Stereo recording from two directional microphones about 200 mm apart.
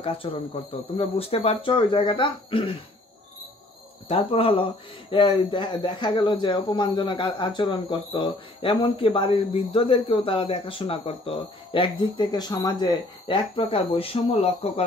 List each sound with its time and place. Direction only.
0.0 s speech: 25° left (ahead or behind)
4.1 s speech: 30° left (ahead or behind)